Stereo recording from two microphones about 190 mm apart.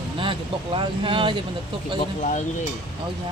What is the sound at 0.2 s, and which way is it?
Speech, 25° right (ahead or behind).